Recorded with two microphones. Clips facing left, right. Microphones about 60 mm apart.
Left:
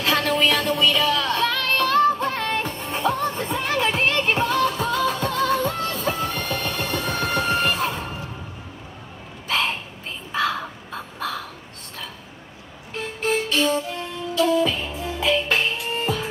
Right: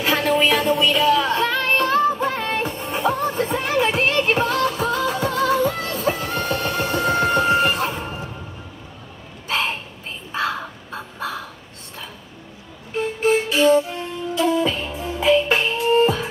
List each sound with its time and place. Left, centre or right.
0.0 s music: centre
9.5 s a sound: centre
10.3 s crow: centre
12.9 s music: centre
14.3 s music: centre
14.8 s music: centre; by 16.2 s right